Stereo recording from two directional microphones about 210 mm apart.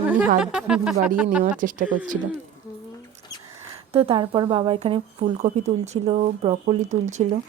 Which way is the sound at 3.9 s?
25° right (ahead or behind).